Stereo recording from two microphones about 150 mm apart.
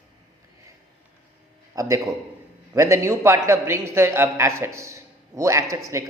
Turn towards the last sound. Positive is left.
turn(degrees=-20)  # may be behind; listen again after turning